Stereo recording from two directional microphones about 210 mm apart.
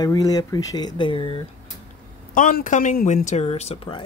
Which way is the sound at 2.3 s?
40° left (ahead or behind).